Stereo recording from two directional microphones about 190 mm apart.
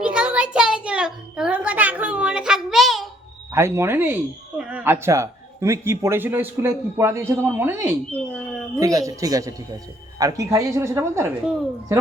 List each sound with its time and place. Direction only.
0.0 s a sound: 5° right (ahead or behind)
3.5 s speech: 15° right (ahead or behind)
8.1 s speech: 10° left (ahead or behind)
8.8 s speech: 20° right (ahead or behind)